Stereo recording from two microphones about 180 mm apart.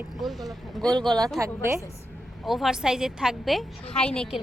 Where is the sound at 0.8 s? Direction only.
20° right (ahead or behind).